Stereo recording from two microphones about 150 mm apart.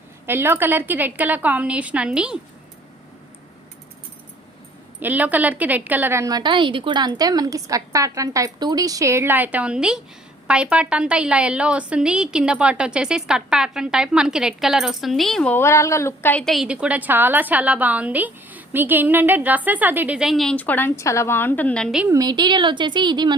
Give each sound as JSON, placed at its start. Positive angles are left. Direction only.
{"t": 0.3, "sound": "a woman's voice", "side_deg": -15}
{"t": 4.9, "sound": "a woman's voice", "side_deg": -10}
{"t": 15.5, "sound": "a woman's voice", "side_deg": 20}
{"t": 22.1, "sound": "a woman's voice", "side_deg": -25}